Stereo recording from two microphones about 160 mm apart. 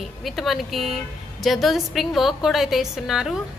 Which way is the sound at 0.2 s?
Centre (ahead or behind).